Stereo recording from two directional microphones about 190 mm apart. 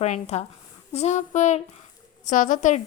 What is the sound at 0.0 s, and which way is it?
A woman's voice, 35° left (ahead or behind).